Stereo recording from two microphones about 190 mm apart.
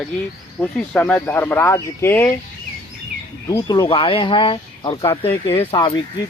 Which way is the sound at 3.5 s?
20° left (ahead or behind).